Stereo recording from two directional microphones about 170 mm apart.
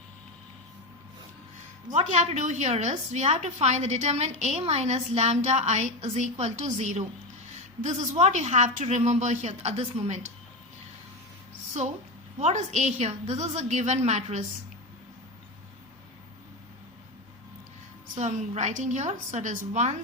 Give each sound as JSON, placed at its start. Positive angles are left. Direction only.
{"t": 1.9, "sound": "a woman's voice", "side_deg": -40}
{"t": 8.1, "sound": "a woman's voice", "side_deg": -40}
{"t": 12.4, "sound": "a woman's voice", "side_deg": -45}
{"t": 18.2, "sound": "a woman's voice", "side_deg": -45}